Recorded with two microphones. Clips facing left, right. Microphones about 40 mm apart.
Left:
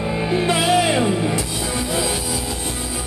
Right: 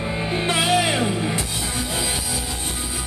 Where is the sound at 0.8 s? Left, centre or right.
Centre.